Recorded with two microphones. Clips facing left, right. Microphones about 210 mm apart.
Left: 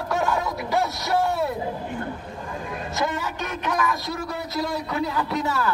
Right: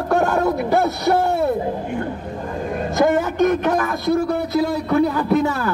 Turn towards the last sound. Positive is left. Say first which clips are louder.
# right 9 dB
turn(degrees=-50)  # may be behind; listen again after turning